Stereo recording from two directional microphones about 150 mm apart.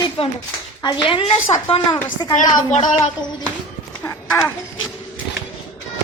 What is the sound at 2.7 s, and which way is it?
Speech, 50° left (ahead or behind).